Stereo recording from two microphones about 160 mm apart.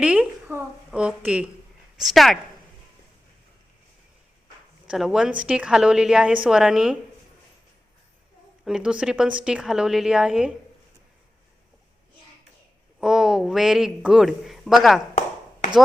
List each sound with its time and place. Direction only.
0.0 s a woman's voice: 5° right (ahead or behind)
4.9 s a woman's voice: 5° right (ahead or behind)
8.6 s a woman's voice: 5° right (ahead or behind)
13.0 s a woman's voice: 5° right (ahead or behind)